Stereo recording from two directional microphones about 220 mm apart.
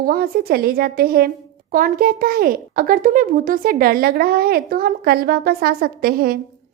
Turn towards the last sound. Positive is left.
turn(degrees=-45)  # may be behind; listen again after turning